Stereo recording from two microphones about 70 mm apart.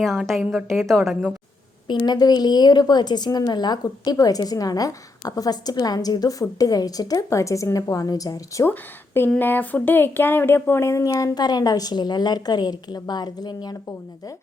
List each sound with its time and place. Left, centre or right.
0.0 s a woman's voice: centre
1.9 s a woman's voice: left
7.3 s a woman's voice: left
8.6 s a woman's voice: left